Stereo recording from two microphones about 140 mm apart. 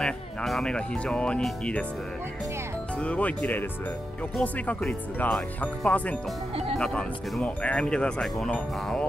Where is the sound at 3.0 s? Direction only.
10° left (ahead or behind).